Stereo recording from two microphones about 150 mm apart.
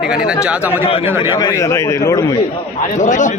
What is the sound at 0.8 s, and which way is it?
Speech, 40° left (ahead or behind).